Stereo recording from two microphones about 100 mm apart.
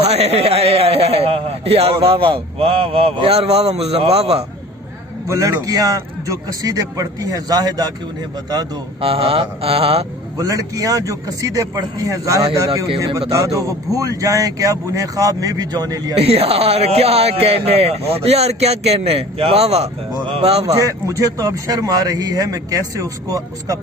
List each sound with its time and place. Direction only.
0.0 s a man's voice: 90° right
5.3 s a man's voice: 35° right (ahead or behind)
9.0 s speech: 70° right (ahead or behind)
10.3 s a man's voice: 35° right (ahead or behind)
16.1 s a man's voice: 90° right
20.7 s a man's voice: 35° right (ahead or behind)